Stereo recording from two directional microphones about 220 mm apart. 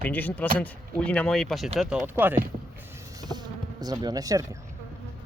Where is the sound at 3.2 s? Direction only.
20° right (ahead or behind).